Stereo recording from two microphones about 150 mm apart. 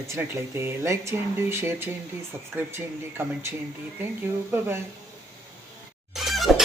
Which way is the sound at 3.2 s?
15° right (ahead or behind).